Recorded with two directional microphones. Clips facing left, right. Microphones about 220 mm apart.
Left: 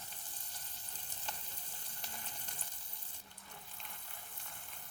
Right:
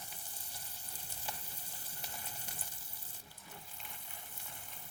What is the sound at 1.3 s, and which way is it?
Frying, 10° right (ahead or behind).